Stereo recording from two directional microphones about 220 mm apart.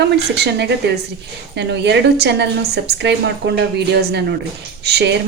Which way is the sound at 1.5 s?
50° right (ahead or behind).